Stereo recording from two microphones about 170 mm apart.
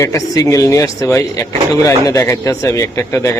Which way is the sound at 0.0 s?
20° left (ahead or behind).